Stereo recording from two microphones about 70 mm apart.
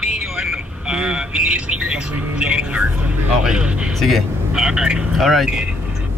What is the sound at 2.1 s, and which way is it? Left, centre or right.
Speech, right.